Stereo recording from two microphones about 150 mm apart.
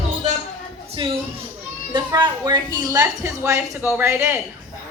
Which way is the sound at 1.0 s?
35° right (ahead or behind).